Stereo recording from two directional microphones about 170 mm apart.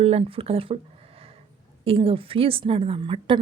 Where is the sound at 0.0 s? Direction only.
35° right (ahead or behind).